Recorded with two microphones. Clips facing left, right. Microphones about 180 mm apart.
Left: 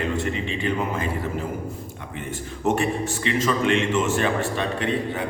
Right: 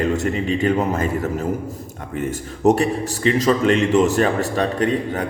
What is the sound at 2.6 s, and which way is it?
A man's voice, 40° right (ahead or behind).